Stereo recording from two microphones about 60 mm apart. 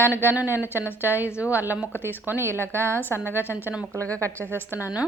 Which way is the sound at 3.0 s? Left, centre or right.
Left.